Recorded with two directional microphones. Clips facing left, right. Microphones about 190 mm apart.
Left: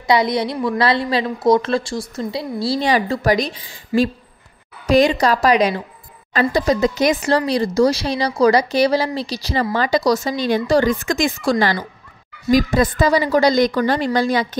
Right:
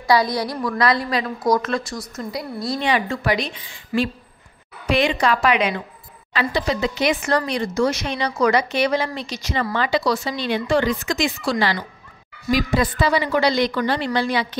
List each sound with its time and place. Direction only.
0.0 s a woman's voice: 20° left (ahead or behind); by 14.6 s 45° left (ahead or behind)